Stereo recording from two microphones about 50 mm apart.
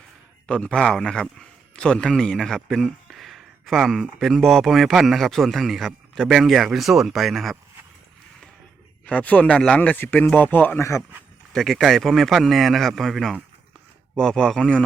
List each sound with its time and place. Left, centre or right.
0.4 s speech: centre
2.6 s speech: centre
9.0 s speech: left
10.8 s speech: left
11.5 s speech: centre